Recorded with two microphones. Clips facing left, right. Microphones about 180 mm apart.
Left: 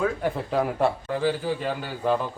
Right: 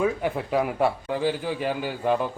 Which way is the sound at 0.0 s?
10° right (ahead or behind).